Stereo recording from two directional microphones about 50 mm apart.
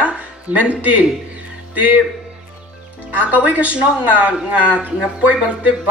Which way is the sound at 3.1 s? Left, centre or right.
Right.